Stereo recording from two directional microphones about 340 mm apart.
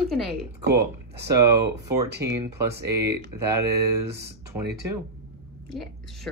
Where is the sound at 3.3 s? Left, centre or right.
Centre.